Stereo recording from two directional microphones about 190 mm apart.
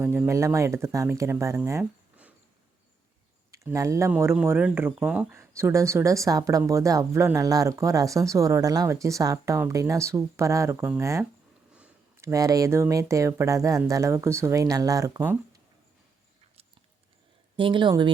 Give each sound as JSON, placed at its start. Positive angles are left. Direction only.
{"t": 0.0, "sound": "speech", "side_deg": -10}
{"t": 3.5, "sound": "speech", "side_deg": -15}
{"t": 17.6, "sound": "speech", "side_deg": -25}